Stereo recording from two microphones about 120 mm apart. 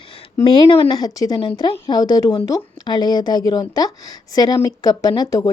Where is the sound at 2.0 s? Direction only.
30° left (ahead or behind).